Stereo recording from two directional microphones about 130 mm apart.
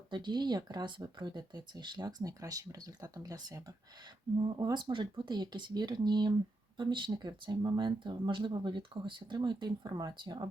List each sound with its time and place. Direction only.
0.1 s speech: 35° right (ahead or behind)